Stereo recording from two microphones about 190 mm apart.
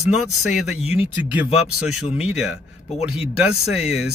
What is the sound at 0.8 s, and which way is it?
Speech, 30° left (ahead or behind).